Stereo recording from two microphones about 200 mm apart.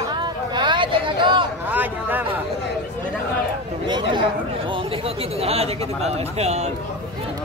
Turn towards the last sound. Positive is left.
turn(degrees=-35)  # may be behind; listen again after turning